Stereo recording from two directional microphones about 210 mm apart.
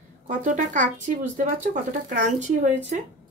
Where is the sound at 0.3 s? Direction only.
40° right (ahead or behind).